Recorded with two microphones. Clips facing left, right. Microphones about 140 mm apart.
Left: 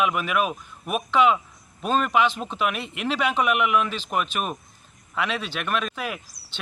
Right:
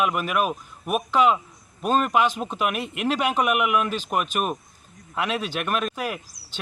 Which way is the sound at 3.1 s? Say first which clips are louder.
Even; 45° right (ahead or behind).